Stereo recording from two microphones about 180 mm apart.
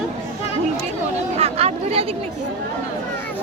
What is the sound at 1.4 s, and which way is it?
Speech, 35° right (ahead or behind).